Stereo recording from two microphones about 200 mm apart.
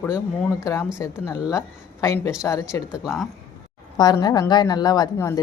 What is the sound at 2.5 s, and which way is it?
Speech, 10° left (ahead or behind).